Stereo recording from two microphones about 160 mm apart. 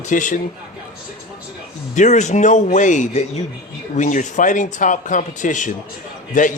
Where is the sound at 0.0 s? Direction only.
55° left (ahead or behind).